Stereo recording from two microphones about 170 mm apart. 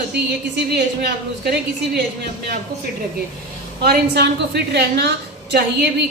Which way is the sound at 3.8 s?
75° right (ahead or behind).